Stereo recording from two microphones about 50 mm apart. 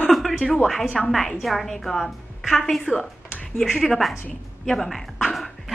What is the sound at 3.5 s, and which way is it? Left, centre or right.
Speech, centre.